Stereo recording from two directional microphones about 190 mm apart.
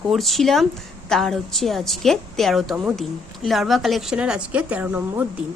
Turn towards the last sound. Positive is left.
turn(degrees=-10)  # may be behind; listen again after turning